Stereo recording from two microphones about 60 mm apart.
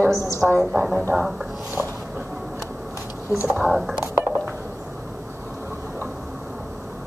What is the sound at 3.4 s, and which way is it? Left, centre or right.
Speech, centre.